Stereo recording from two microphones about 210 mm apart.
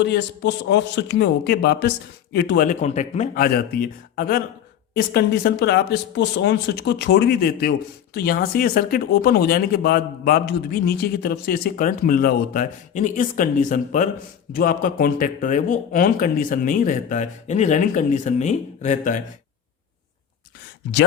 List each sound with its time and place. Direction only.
0.0 s speech: 55° left (ahead or behind); by 19.2 s 35° left (ahead or behind)